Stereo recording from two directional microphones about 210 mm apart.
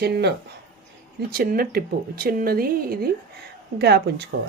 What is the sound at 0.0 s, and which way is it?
Speech, 50° right (ahead or behind).